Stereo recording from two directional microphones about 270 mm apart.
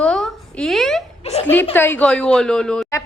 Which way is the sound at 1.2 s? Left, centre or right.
Left.